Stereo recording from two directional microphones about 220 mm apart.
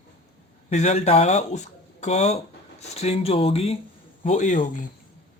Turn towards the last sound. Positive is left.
turn(degrees=35)  # may be behind; listen again after turning